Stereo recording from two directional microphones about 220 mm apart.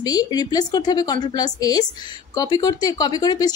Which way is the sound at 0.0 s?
15° left (ahead or behind).